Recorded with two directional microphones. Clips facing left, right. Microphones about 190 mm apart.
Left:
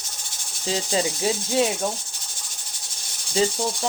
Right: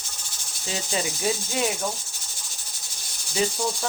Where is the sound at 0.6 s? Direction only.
30° left (ahead or behind).